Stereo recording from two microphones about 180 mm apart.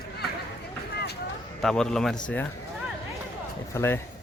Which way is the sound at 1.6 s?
5° left (ahead or behind).